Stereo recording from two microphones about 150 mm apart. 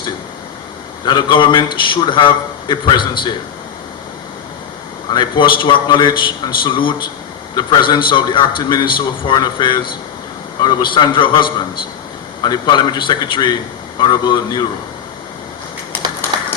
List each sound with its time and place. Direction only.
1.0 s a man's voice: 30° left (ahead or behind)
5.1 s a man's voice: 30° left (ahead or behind)